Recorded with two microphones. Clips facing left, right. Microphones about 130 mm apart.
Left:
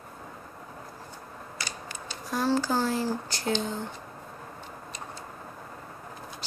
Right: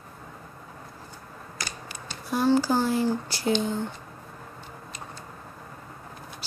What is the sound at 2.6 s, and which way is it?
Speech, 15° right (ahead or behind).